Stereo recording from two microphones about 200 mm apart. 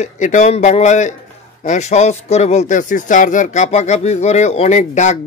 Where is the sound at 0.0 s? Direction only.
35° left (ahead or behind).